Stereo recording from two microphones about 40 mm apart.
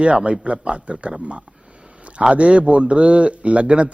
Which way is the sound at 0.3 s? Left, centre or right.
Right.